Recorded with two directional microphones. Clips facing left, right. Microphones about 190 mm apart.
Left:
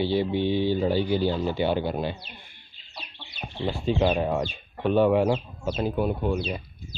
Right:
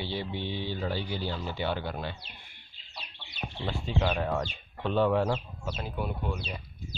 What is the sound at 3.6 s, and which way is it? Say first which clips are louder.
Speech: left 7 dB; 20° left (ahead or behind).